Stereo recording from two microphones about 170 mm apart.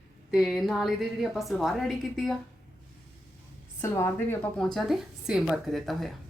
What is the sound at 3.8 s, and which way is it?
Speech, 15° left (ahead or behind).